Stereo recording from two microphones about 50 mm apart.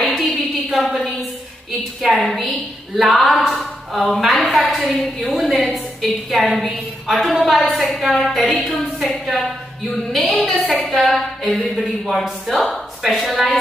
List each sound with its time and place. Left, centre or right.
0.0 s a sound: centre
2.0 s a woman's voice: centre
8.7 s speech: left
9.2 s a woman's voice: centre
13.0 s a woman's voice: centre